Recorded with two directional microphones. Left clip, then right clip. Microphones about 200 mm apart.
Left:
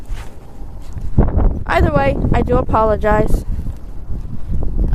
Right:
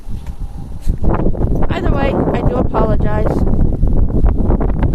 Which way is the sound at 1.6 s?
15° right (ahead or behind).